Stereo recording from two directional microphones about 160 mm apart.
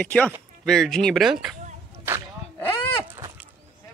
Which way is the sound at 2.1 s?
10° right (ahead or behind).